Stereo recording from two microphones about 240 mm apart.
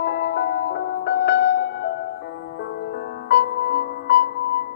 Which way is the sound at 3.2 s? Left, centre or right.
Left.